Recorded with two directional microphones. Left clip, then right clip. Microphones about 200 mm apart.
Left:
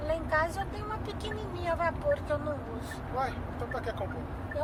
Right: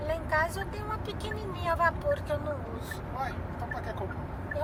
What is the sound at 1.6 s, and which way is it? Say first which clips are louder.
Speech: right 3 dB; 15° right (ahead or behind).